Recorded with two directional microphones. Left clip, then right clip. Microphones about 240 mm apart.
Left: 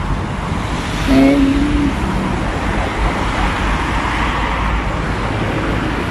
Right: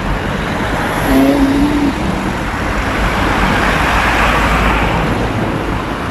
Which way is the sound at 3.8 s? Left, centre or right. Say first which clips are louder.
Right 6 dB; right.